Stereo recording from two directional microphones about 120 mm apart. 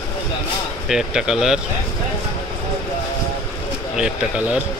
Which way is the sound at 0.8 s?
5° right (ahead or behind).